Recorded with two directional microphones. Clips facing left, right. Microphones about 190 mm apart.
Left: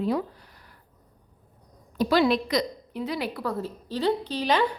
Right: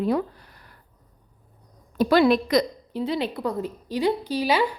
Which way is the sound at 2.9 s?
25° right (ahead or behind).